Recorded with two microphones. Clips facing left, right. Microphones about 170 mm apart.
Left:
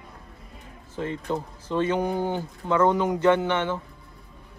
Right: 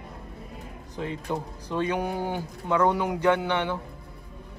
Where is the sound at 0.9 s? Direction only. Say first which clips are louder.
Left 2 dB; 15° right (ahead or behind).